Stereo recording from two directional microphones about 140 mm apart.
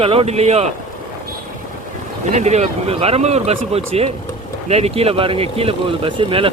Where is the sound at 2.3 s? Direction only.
55° right (ahead or behind); by 6.5 s 40° right (ahead or behind).